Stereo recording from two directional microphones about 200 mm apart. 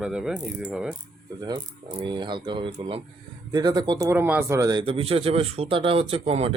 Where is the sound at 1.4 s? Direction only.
20° right (ahead or behind).